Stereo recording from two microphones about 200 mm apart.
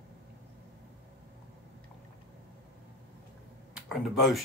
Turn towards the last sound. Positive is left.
turn(degrees=0)  # may be behind; listen again after turning